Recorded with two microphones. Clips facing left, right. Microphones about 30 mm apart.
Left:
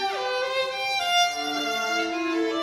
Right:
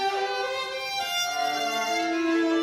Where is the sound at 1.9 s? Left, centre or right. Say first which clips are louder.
Right 1 dB; centre.